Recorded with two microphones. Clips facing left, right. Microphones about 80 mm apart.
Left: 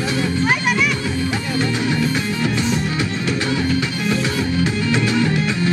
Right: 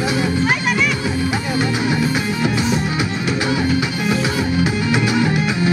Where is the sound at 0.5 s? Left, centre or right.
Centre.